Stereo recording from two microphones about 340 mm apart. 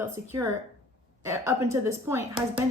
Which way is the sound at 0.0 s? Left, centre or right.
Centre.